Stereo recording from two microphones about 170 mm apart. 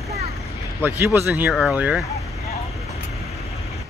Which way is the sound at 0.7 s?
15° right (ahead or behind).